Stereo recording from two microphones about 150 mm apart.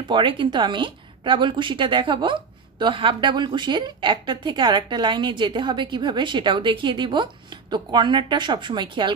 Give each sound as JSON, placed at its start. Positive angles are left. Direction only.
{"t": 0.1, "sound": "speech", "side_deg": -35}